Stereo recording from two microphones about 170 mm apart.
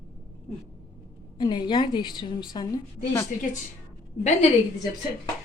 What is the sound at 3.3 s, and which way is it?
A woman's voice, 50° left (ahead or behind).